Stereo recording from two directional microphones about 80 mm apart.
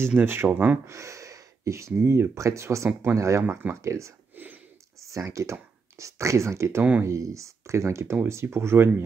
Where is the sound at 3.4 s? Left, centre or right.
Right.